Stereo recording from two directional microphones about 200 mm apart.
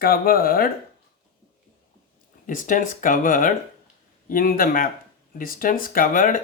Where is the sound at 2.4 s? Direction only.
40° left (ahead or behind).